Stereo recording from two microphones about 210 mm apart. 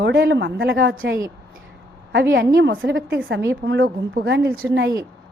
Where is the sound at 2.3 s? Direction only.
55° right (ahead or behind).